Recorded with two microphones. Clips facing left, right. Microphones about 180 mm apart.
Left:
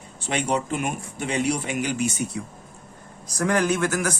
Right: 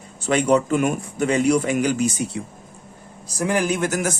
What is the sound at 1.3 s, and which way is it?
Speech, 40° right (ahead or behind).